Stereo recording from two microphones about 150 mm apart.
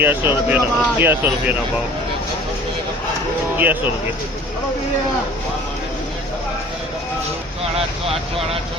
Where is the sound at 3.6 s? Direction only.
10° right (ahead or behind).